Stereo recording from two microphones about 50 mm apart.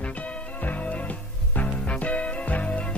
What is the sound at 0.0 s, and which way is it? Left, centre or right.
Music, left.